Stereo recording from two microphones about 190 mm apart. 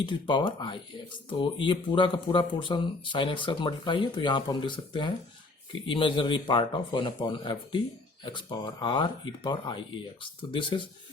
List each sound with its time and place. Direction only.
0.0 s speech: 25° left (ahead or behind)